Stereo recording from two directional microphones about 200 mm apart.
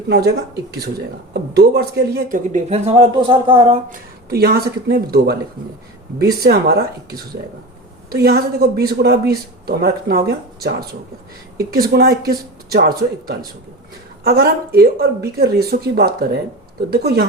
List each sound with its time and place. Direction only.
0.1 s speech: 55° right (ahead or behind)
2.5 s speech: 35° right (ahead or behind)
3.8 s speech: 45° right (ahead or behind)
6.4 s speech: 55° right (ahead or behind)